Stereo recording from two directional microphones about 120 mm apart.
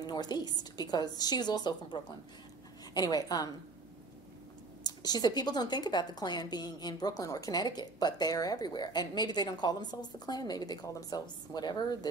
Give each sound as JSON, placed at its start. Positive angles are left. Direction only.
{"t": 0.0, "sound": "a woman's voice", "side_deg": 35}
{"t": 4.8, "sound": "a woman's voice", "side_deg": 35}